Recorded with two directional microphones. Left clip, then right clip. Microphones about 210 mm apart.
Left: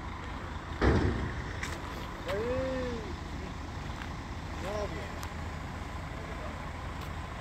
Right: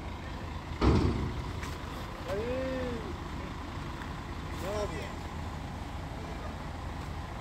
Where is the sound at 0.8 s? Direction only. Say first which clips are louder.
Even; 50° right (ahead or behind).